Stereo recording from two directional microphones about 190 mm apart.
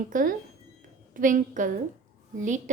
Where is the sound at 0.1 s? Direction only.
45° right (ahead or behind).